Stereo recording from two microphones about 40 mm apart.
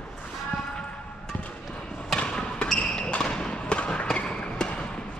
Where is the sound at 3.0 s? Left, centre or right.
Left.